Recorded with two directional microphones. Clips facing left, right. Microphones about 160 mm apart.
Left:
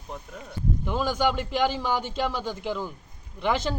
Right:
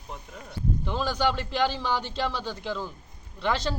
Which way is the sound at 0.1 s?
Centre (ahead or behind).